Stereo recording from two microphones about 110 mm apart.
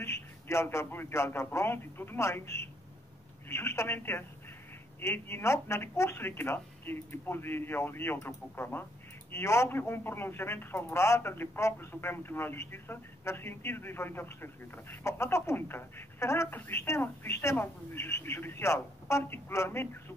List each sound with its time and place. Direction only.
0.0 s speech: 25° left (ahead or behind)